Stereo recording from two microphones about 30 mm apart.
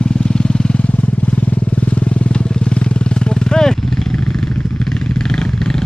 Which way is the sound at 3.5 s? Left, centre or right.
Centre.